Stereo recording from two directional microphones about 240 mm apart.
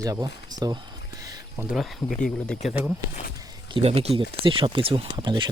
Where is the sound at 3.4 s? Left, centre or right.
Right.